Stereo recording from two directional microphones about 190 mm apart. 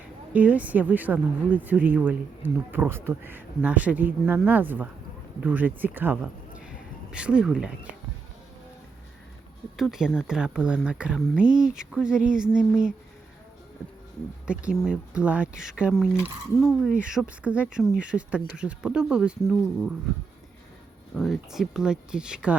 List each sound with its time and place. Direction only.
0.3 s a woman's voice: 10° right (ahead or behind)
9.7 s speech: centre (ahead or behind)
14.4 s speech: 5° right (ahead or behind)
21.2 s speech: centre (ahead or behind)